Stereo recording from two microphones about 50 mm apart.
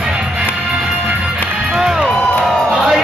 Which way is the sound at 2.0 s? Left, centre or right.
Left.